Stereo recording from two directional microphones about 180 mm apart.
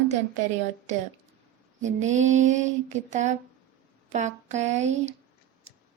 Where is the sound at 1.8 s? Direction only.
40° right (ahead or behind).